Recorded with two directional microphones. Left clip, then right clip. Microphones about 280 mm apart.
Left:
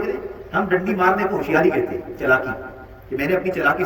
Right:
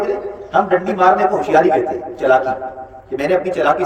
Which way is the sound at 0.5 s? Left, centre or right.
Right.